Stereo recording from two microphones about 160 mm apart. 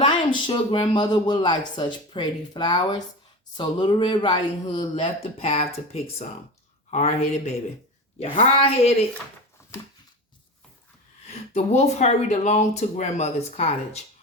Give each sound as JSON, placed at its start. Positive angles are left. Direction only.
{"t": 0.3, "sound": "speech", "side_deg": 30}
{"t": 11.3, "sound": "speech", "side_deg": 45}